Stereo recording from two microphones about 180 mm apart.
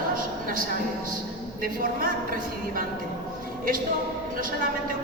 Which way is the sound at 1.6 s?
50° right (ahead or behind).